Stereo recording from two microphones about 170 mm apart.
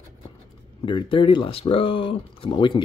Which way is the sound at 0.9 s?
30° left (ahead or behind).